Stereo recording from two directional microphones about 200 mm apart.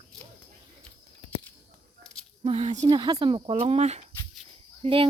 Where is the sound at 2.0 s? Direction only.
5° left (ahead or behind).